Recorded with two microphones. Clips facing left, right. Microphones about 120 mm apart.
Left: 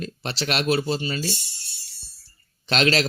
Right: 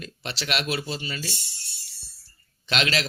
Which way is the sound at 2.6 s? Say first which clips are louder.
Left 5 dB; 40° left (ahead or behind).